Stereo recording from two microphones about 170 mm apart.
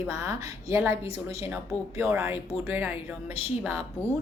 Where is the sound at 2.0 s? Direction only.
10° right (ahead or behind).